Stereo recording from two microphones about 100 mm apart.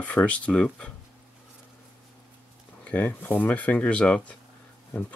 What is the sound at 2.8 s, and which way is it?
Speech, 15° left (ahead or behind).